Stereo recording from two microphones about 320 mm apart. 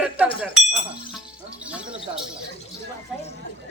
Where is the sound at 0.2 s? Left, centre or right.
Centre.